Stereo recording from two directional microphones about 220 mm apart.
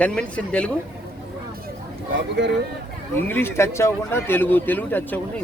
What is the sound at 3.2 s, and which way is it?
Speech, 10° left (ahead or behind).